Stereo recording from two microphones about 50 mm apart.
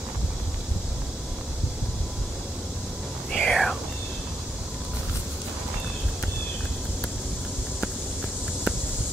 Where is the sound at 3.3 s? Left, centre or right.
Centre.